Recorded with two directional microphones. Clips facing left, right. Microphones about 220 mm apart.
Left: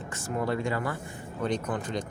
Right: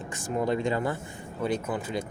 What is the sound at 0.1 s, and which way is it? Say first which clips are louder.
Speech: right 2 dB; 15° right (ahead or behind).